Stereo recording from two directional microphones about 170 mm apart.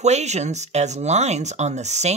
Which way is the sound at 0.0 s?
40° right (ahead or behind).